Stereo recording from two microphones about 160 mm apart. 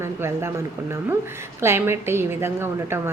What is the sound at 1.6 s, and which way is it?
A woman's voice, 15° right (ahead or behind).